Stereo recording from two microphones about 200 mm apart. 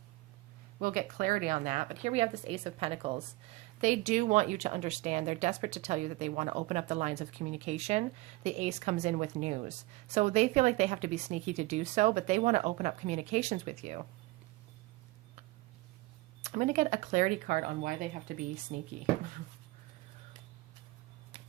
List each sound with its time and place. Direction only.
0.8 s speech: 45° right (ahead or behind)
16.4 s speech: 35° right (ahead or behind)